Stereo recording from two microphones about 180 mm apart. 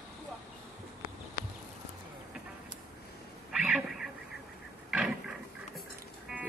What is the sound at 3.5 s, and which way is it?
Duck, 5° right (ahead or behind).